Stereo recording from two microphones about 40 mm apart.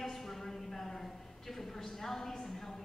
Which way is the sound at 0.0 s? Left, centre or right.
Centre.